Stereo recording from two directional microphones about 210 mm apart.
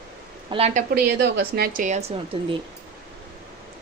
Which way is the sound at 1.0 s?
50° right (ahead or behind).